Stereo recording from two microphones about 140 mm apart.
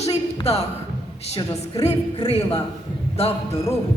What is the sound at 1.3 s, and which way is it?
Speech, 25° left (ahead or behind).